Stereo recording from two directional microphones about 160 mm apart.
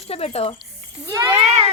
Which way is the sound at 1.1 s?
20° right (ahead or behind).